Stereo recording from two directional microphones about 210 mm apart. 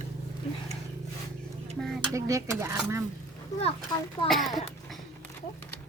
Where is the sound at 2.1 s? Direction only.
15° right (ahead or behind).